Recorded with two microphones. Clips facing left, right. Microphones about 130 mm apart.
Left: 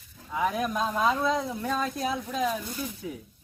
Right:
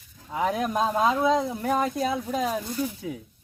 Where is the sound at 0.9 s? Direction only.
20° right (ahead or behind).